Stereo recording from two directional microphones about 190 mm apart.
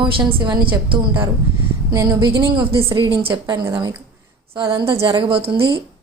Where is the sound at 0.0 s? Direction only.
25° right (ahead or behind).